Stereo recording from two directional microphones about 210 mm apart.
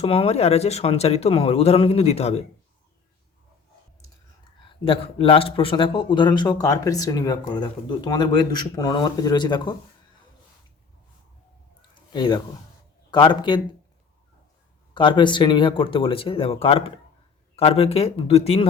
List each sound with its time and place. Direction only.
0.0 s a man's voice: 30° left (ahead or behind)
4.9 s a man's voice: 25° left (ahead or behind)
12.1 s a man's voice: 20° left (ahead or behind)
14.9 s a man's voice: 20° left (ahead or behind)